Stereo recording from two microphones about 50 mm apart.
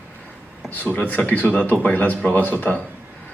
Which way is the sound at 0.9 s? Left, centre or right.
Left.